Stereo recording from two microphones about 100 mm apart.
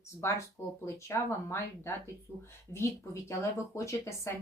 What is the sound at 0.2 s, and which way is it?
Speech, 25° left (ahead or behind).